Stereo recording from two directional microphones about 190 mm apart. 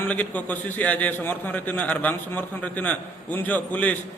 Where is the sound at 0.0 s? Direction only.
10° left (ahead or behind).